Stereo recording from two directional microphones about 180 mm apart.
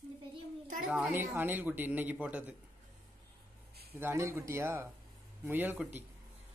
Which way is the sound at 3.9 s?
15° right (ahead or behind).